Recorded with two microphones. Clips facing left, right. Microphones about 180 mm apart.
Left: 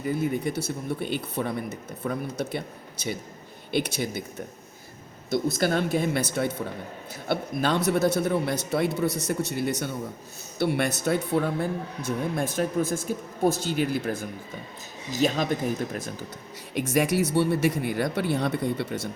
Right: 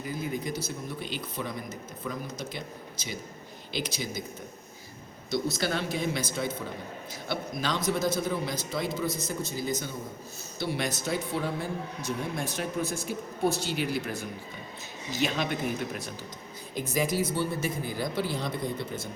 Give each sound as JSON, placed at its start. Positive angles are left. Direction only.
{"t": 0.1, "sound": "a man's voice", "side_deg": 65}
{"t": 3.8, "sound": "a man's voice", "side_deg": 60}
{"t": 5.3, "sound": "a man's voice", "side_deg": 50}
{"t": 16.7, "sound": "speech", "side_deg": 70}